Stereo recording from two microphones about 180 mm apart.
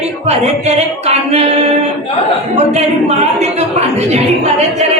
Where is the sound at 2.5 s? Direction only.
35° right (ahead or behind).